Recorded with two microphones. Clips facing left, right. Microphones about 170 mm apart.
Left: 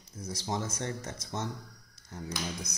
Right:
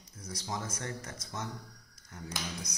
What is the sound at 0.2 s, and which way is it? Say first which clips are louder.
Speech: left 4 dB; 25° left (ahead or behind).